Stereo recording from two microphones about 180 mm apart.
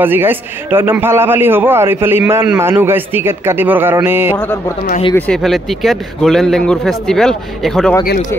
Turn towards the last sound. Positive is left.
turn(degrees=5)  # may be behind; listen again after turning